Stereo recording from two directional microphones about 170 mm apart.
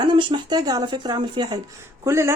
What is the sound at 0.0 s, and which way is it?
Speech, 25° right (ahead or behind).